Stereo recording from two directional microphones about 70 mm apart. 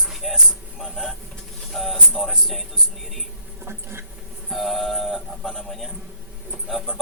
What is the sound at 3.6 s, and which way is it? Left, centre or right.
Insect, right.